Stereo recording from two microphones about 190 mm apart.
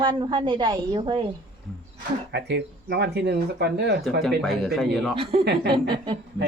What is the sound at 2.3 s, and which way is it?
Speech, 65° right (ahead or behind).